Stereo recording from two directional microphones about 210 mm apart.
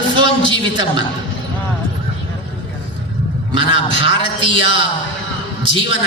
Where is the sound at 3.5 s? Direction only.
25° right (ahead or behind).